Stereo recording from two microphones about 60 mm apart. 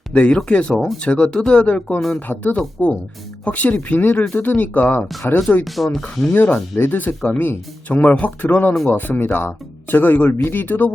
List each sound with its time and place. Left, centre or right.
0.1 s speech: centre
5.6 s speech: centre
6.3 s speech: left